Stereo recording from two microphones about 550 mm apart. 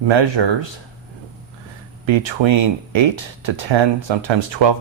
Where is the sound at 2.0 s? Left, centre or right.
Right.